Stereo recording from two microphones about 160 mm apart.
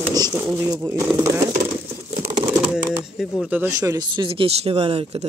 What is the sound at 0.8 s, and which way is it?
Speech, 20° right (ahead or behind).